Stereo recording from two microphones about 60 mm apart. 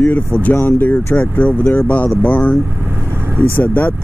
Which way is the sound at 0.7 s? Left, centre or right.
Left.